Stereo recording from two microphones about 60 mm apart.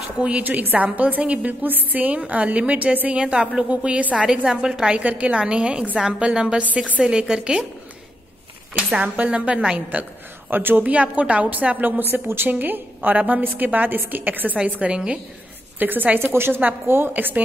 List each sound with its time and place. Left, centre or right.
0.2 s a woman's voice: right
8.9 s a woman's voice: right
10.5 s a woman's voice: right
14.6 s a woman's voice: centre
15.8 s a woman's voice: right